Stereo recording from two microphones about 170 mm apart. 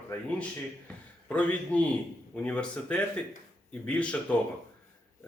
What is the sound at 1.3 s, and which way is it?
Speech, 10° left (ahead or behind).